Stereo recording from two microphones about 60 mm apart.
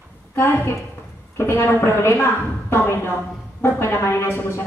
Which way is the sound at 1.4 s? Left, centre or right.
Left.